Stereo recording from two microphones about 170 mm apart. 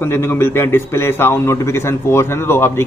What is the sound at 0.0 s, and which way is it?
A man's voice, 15° left (ahead or behind).